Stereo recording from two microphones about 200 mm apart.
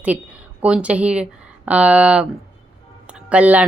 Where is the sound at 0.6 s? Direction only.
5° right (ahead or behind).